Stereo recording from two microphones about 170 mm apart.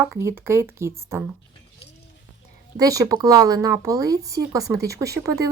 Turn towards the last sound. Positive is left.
turn(degrees=-20)  # may be behind; listen again after turning